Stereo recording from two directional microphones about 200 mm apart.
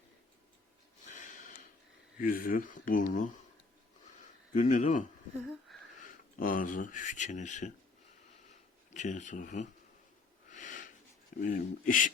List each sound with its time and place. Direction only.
1.0 s a sound: 40° left (ahead or behind)
2.1 s speech: 45° left (ahead or behind)
4.5 s speech: 40° left (ahead or behind)
8.4 s a sound: 40° left (ahead or behind)
10.5 s wheeze: 40° left (ahead or behind)
11.3 s speech: 40° left (ahead or behind)